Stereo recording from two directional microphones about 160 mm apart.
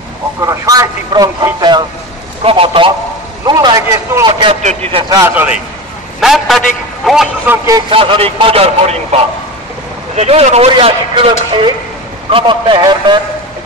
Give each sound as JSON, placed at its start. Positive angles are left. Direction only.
{"t": 0.4, "sound": "a man's voice", "side_deg": -20}
{"t": 4.3, "sound": "a man's voice", "side_deg": -35}
{"t": 5.1, "sound": "a man's voice", "side_deg": -15}
{"t": 6.2, "sound": "a man's voice", "side_deg": 0}
{"t": 7.4, "sound": "a man's voice", "side_deg": -20}
{"t": 7.9, "sound": "a man's voice", "side_deg": -35}